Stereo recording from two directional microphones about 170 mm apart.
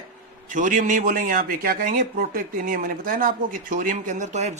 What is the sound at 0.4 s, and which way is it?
A man's voice, 50° right (ahead or behind).